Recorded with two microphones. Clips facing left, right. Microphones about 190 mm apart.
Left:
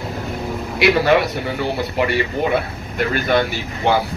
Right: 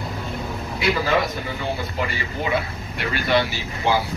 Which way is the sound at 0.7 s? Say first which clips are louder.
Left 6 dB; 75° left (ahead or behind).